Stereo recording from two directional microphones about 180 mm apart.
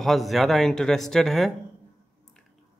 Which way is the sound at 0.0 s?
Centre (ahead or behind).